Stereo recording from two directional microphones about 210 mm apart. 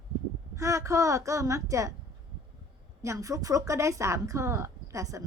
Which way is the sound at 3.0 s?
15° right (ahead or behind).